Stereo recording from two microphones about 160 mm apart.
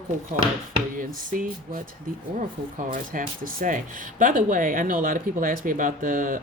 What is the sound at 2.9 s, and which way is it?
Speech, 60° right (ahead or behind).